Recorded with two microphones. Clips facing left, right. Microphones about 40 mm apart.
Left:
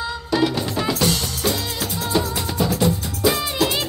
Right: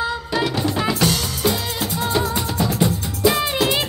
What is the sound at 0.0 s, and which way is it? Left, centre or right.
Music, centre.